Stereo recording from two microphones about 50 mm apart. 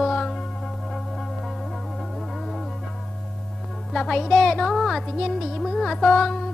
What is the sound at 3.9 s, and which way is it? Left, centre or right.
Music, centre.